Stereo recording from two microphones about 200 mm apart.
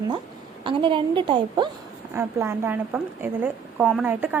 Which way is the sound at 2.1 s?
10° right (ahead or behind).